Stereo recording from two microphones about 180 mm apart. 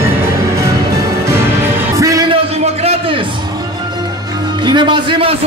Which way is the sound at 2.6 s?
35° right (ahead or behind).